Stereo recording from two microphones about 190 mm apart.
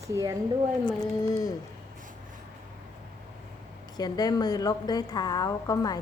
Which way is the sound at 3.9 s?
20° left (ahead or behind).